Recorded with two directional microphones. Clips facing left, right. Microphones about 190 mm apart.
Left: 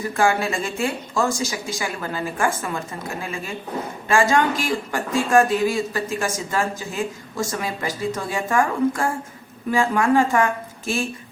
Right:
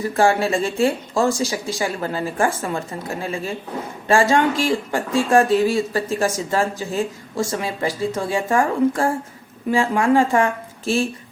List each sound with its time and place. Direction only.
0.0 s speech: 35° right (ahead or behind)